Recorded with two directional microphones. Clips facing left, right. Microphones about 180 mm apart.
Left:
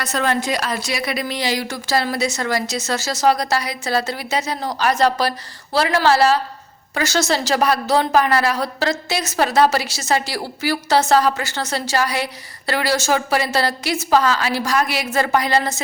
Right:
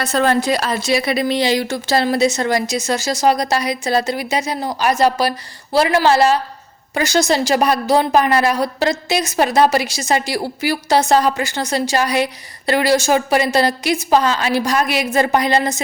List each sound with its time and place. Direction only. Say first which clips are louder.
0.0 s a woman's voice: right 5 dB; 30° right (ahead or behind)